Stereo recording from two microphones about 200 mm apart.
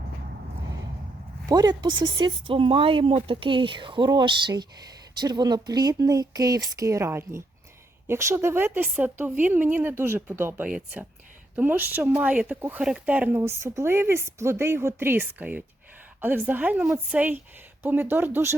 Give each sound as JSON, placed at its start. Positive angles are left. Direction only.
{"t": 1.5, "sound": "speech", "side_deg": -20}